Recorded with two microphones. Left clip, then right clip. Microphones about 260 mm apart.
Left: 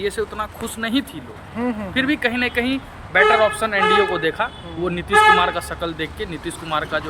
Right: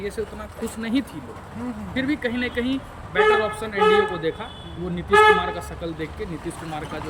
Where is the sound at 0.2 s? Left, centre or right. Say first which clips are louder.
Left 5 dB; left.